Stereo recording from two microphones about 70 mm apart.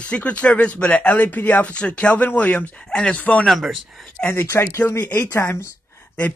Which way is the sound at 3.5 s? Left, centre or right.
Centre.